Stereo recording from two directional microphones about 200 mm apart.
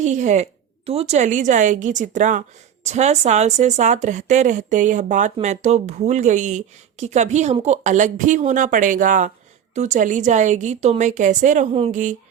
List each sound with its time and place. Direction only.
0.0 s speech: 35° right (ahead or behind)